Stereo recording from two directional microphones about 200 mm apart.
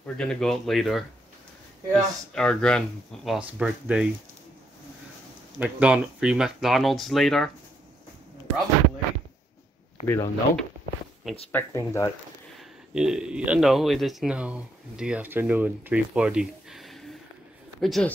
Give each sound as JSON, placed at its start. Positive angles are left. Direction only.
{"t": 0.0, "sound": "speech", "side_deg": 5}
{"t": 5.6, "sound": "speech", "side_deg": -5}
{"t": 10.0, "sound": "speech", "side_deg": 10}
{"t": 12.5, "sound": "speech", "side_deg": -5}